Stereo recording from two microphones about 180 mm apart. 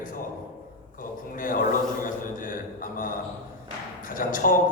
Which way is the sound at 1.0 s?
50° left (ahead or behind).